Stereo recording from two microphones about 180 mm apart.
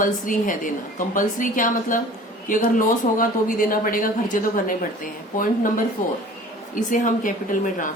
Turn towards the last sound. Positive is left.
turn(degrees=50)  # may be behind; listen again after turning